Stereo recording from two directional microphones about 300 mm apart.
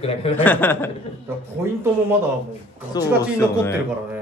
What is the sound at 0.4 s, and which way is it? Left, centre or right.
Speech, centre.